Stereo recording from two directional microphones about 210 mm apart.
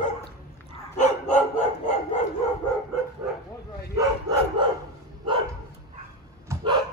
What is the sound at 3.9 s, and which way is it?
Bow-wow, 20° right (ahead or behind).